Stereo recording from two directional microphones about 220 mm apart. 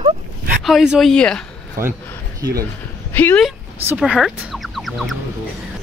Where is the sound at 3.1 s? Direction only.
10° left (ahead or behind).